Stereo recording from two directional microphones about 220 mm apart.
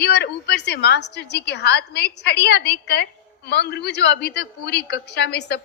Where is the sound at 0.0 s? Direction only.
50° left (ahead or behind).